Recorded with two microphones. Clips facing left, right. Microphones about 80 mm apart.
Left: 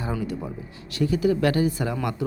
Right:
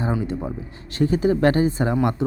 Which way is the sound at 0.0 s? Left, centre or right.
Right.